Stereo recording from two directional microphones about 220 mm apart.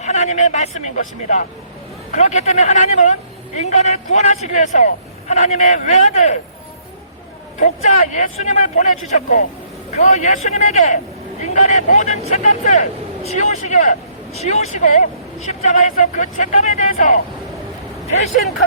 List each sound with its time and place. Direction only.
0.0 s speech: 30° left (ahead or behind)
7.6 s speech: 35° left (ahead or behind)